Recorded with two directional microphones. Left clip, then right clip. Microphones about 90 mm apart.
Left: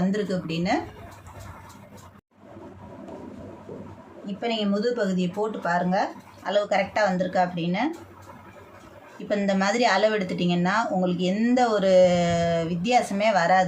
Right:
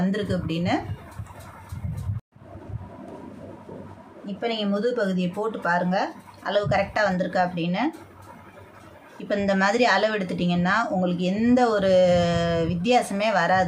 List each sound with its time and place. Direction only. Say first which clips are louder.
0.0 s speech: even; 35° right (ahead or behind)
4.3 s speech: even; 35° right (ahead or behind)
9.3 s speech: right 2 dB; 40° right (ahead or behind)